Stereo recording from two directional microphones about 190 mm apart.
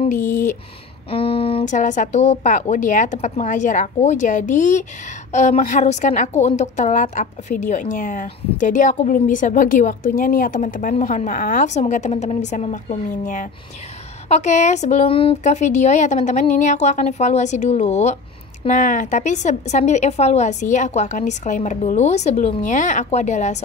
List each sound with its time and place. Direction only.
0.1 s speech: 40° left (ahead or behind)
1.1 s a woman's voice: 30° left (ahead or behind)